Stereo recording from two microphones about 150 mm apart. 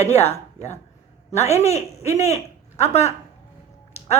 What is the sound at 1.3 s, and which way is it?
Speech, 45° left (ahead or behind).